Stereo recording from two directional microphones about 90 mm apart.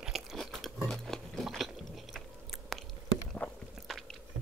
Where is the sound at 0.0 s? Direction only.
5° right (ahead or behind).